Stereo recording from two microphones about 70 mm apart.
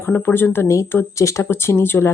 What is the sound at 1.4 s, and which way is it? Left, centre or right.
Speech, left.